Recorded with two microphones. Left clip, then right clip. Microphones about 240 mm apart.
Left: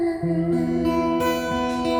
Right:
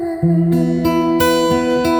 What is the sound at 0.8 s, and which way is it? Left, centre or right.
Music, right.